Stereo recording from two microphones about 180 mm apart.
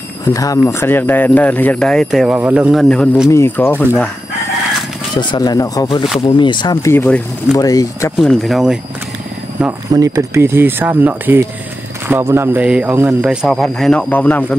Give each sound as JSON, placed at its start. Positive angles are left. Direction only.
{"t": 0.2, "sound": "speech", "side_deg": 20}
{"t": 3.3, "sound": "speech", "side_deg": 15}
{"t": 5.1, "sound": "speech", "side_deg": 25}
{"t": 8.2, "sound": "a man's voice", "side_deg": 0}
{"t": 9.6, "sound": "a man's voice", "side_deg": -15}